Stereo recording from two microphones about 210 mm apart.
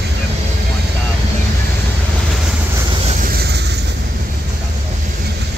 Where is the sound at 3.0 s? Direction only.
40° right (ahead or behind).